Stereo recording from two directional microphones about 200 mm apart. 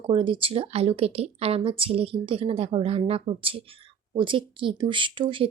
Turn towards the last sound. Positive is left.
turn(degrees=-25)  # may be behind; listen again after turning